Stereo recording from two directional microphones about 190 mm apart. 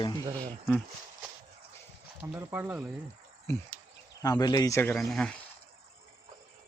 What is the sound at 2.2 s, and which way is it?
Speech, 15° right (ahead or behind).